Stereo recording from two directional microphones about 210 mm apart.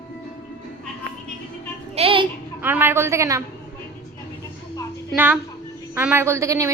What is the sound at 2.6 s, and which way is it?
Speech, 10° right (ahead or behind).